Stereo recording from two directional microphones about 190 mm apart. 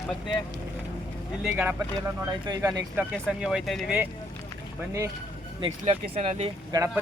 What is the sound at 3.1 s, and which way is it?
Speech, centre (ahead or behind).